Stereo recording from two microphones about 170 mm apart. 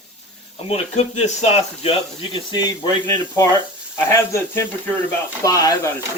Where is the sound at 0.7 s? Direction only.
40° left (ahead or behind); by 5.9 s 20° left (ahead or behind).